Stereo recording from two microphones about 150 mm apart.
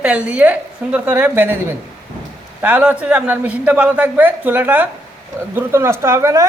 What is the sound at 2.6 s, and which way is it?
A woman's voice, 10° right (ahead or behind).